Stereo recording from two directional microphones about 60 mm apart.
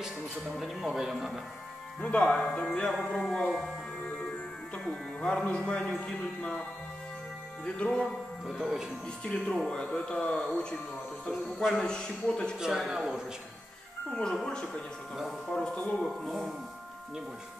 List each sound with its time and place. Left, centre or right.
0.0 s speech: centre
2.0 s a man's voice: centre
4.8 s speech: centre
5.4 s speech: left
7.6 s a man's voice: centre
9.2 s a man's voice: centre
12.7 s speech: centre
14.1 s a man's voice: centre
16.0 s speech: centre